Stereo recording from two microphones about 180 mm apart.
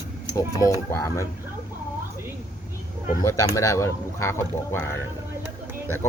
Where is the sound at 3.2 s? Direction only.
15° left (ahead or behind).